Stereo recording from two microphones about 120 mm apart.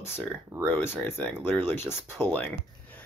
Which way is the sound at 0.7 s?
15° left (ahead or behind).